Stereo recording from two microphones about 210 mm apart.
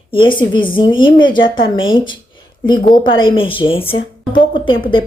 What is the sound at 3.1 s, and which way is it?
Speech, 25° left (ahead or behind).